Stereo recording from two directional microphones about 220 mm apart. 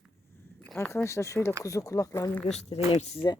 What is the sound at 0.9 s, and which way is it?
Speech, 15° left (ahead or behind).